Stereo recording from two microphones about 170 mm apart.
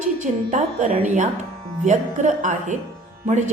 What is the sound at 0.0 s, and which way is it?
A woman's voice, 45° right (ahead or behind).